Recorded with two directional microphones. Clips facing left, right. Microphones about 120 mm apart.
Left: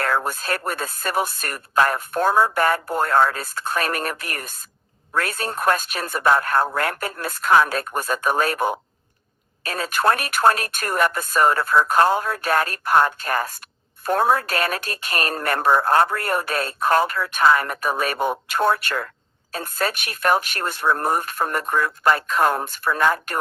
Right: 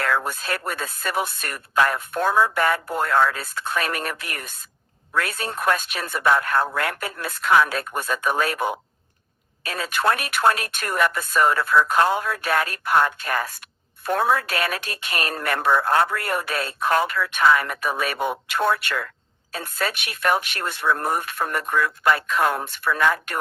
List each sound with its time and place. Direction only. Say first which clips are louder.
0.0 s speech: left 1 dB; 40° left (ahead or behind)